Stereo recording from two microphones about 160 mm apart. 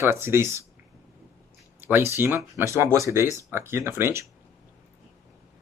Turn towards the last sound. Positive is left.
turn(degrees=-15)  # may be behind; listen again after turning